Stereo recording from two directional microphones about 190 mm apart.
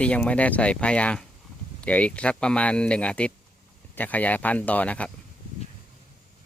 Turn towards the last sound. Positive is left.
turn(degrees=5)  # may be behind; listen again after turning